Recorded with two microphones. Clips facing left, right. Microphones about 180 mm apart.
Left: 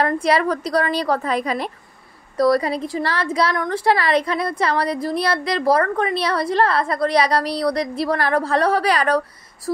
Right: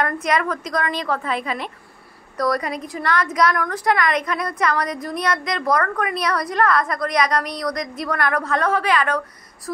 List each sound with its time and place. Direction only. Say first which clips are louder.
0.0 s a woman's voice: left 3 dB; 30° left (ahead or behind)